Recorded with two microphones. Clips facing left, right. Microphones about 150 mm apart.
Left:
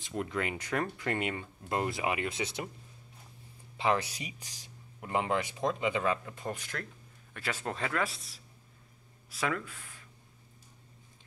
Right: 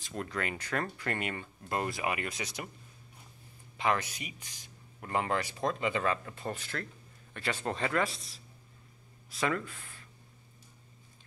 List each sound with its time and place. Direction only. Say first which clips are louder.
0.0 s speech: left 2 dB; 20° left (ahead or behind)
3.7 s speech: left 1 dB; 25° left (ahead or behind)
5.0 s speech: left 1 dB; 15° left (ahead or behind)